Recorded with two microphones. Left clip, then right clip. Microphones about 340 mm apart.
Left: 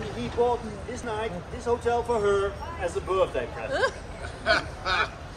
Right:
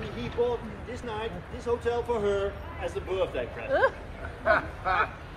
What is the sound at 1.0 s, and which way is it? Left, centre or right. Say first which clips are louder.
Speech: left 4 dB; left.